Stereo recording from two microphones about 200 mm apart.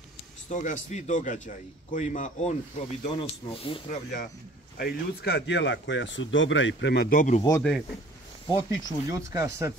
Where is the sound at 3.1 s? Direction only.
25° left (ahead or behind).